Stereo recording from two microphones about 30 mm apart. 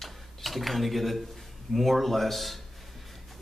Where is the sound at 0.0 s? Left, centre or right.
Centre.